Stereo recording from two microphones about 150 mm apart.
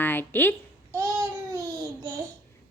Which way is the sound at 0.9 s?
20° right (ahead or behind).